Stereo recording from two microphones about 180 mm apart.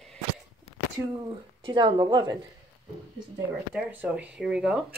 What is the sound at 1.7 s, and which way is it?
Speech, 25° right (ahead or behind).